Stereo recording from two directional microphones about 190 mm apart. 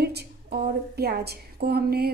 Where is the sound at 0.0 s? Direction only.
55° right (ahead or behind).